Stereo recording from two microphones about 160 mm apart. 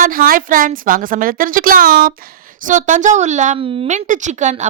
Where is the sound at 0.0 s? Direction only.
65° right (ahead or behind).